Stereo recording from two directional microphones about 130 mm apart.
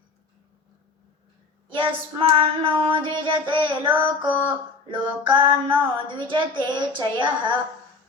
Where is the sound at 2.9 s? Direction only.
40° right (ahead or behind).